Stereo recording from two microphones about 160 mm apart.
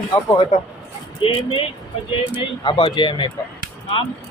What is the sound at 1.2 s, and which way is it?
Speech, 35° left (ahead or behind).